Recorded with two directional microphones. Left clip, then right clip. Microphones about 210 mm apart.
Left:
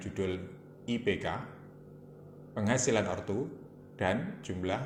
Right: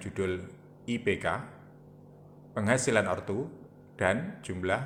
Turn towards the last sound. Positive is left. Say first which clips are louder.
# right 4 dB
turn(degrees=-25)  # may be behind; listen again after turning